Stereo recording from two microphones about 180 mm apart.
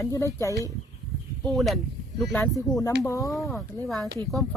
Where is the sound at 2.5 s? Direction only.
20° left (ahead or behind).